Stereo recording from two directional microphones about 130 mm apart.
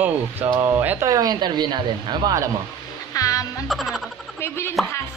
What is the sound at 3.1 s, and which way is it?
Music, 25° left (ahead or behind).